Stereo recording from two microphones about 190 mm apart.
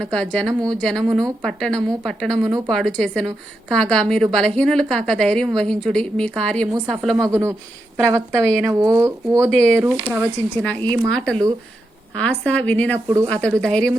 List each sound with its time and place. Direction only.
0.0 s a woman's voice: 5° left (ahead or behind)
7.2 s speech: 15° right (ahead or behind)
8.3 s a woman's voice: 5° left (ahead or behind)
8.7 s speech: 15° right (ahead or behind)
9.5 s a woman's voice: 5° left (ahead or behind)
9.7 s speech: 15° right (ahead or behind)
10.6 s a woman's voice: 5° left (ahead or behind)